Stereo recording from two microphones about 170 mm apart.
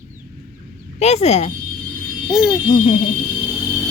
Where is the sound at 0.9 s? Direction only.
40° left (ahead or behind).